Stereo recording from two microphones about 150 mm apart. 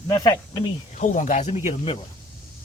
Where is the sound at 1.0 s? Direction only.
55° left (ahead or behind).